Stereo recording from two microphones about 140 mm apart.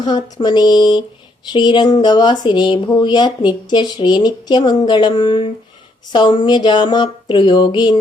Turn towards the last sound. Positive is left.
turn(degrees=30)  # may be behind; listen again after turning